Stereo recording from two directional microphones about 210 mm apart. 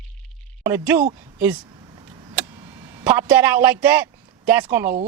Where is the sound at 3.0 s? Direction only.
10° right (ahead or behind).